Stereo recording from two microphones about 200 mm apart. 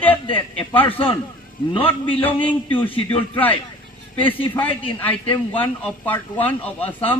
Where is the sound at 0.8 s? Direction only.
25° left (ahead or behind).